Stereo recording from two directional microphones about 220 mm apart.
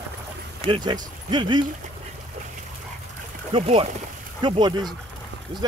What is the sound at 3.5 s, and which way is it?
Speech, 25° right (ahead or behind).